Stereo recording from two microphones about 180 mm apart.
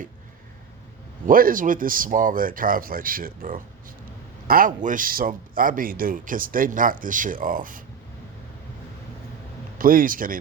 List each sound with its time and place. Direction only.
1.3 s a man's voice: 50° right (ahead or behind)
9.7 s a man's voice: 50° right (ahead or behind)